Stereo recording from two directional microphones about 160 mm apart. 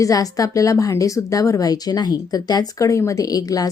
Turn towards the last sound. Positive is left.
turn(degrees=20)  # may be behind; listen again after turning